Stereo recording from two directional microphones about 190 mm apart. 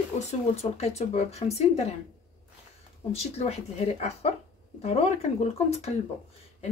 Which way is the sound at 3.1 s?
35° left (ahead or behind).